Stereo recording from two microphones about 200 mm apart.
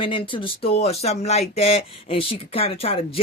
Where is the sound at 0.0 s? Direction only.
25° left (ahead or behind).